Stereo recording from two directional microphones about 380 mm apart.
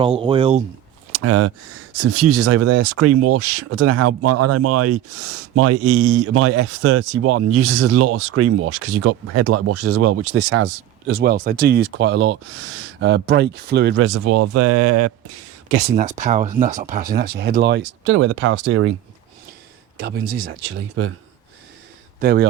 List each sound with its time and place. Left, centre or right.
0.2 s speech: centre
1.1 s speech: right
15.7 s speech: centre
20.0 s speech: right
22.2 s speech: right